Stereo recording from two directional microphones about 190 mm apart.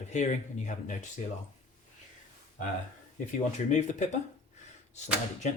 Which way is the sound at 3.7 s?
40° left (ahead or behind).